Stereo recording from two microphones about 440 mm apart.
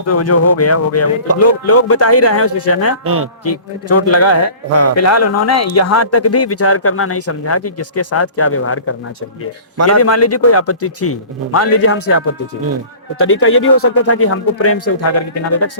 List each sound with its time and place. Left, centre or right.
0.1 s speech: left
3.0 s a man's voice: right
3.4 s speech: left
9.7 s a man's voice: right
10.0 s speech: left